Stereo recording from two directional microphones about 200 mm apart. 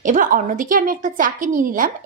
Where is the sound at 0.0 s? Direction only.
40° right (ahead or behind).